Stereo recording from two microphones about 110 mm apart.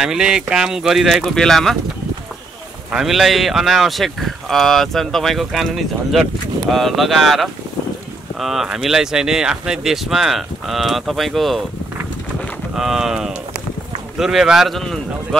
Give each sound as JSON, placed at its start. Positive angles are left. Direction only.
{"t": 0.0, "sound": "speech", "side_deg": -5}
{"t": 2.9, "sound": "speech", "side_deg": -5}
{"t": 12.7, "sound": "speech", "side_deg": -5}